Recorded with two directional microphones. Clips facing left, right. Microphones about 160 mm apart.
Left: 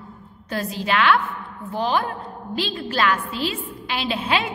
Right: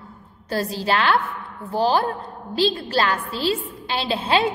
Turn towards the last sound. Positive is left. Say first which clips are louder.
# right 3 dB
turn(degrees=-35)  # may be behind; listen again after turning